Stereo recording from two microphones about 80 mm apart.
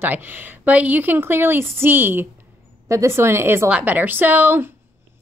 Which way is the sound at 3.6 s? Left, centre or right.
Centre.